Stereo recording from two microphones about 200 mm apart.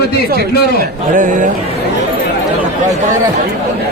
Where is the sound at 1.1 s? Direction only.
40° right (ahead or behind).